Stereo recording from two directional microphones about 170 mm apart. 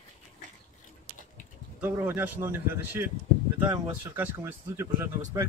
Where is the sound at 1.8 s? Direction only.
10° right (ahead or behind).